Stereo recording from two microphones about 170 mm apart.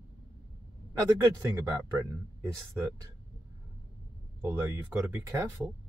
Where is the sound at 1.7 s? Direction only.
20° right (ahead or behind).